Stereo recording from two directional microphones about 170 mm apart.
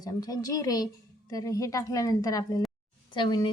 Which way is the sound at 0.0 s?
20° left (ahead or behind).